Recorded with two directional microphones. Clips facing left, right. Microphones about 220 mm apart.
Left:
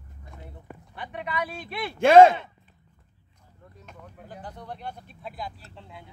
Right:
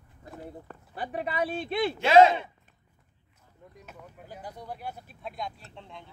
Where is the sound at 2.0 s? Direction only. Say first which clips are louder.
Left 5 dB; 50° left (ahead or behind).